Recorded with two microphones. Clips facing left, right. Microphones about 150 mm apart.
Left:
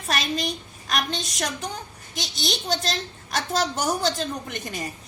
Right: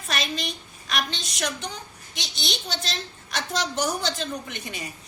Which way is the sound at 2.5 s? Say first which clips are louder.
Left 6 dB; 40° left (ahead or behind).